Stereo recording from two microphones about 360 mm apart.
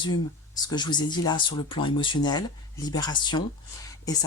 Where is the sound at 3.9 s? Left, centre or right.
Centre.